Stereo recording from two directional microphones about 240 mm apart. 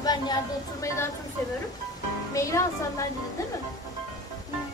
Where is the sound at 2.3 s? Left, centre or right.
Centre.